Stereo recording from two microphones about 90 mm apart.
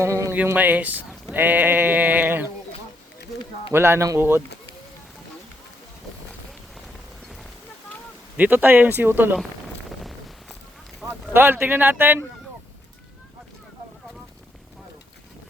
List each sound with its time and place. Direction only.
0.0 s speech: 35° right (ahead or behind)
0.4 s speech: 20° right (ahead or behind)
3.7 s speech: 25° right (ahead or behind)
8.4 s speech: 20° right (ahead or behind)
11.0 s speech: 25° right (ahead or behind)